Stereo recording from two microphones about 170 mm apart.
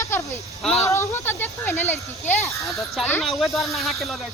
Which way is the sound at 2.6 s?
Centre (ahead or behind).